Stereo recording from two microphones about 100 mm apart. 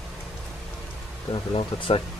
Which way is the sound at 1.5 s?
60° left (ahead or behind).